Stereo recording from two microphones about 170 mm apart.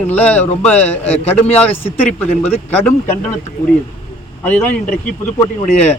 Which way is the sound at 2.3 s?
40° left (ahead or behind).